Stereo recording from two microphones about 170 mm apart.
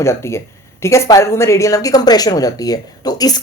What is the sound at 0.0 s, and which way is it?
Speech, 15° left (ahead or behind).